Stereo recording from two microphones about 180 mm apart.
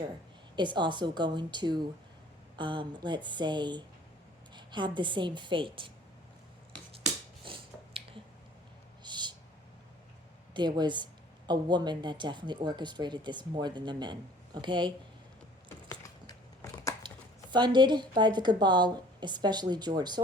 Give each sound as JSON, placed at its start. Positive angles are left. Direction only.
{"t": 0.5, "sound": "speech", "side_deg": -25}
{"t": 7.4, "sound": "finger snapping", "side_deg": -30}
{"t": 9.0, "sound": "a sound", "side_deg": -25}
{"t": 10.5, "sound": "speech", "side_deg": -25}
{"t": 17.0, "sound": "a sound", "side_deg": -25}
{"t": 17.5, "sound": "speech", "side_deg": -25}